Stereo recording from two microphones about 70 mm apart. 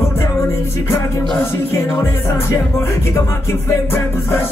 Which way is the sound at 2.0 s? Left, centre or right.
Left.